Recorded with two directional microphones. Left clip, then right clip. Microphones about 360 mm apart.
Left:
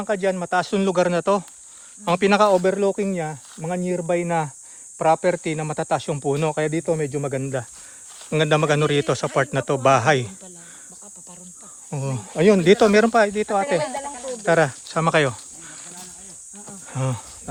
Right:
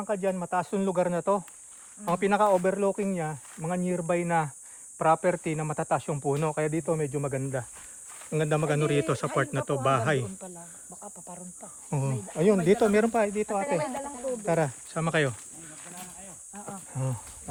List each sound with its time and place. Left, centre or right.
0.0 s speech: left
11.9 s speech: centre
12.4 s speech: centre
16.9 s cricket: centre